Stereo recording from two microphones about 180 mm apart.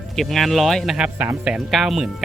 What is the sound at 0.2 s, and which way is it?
Speech, centre (ahead or behind).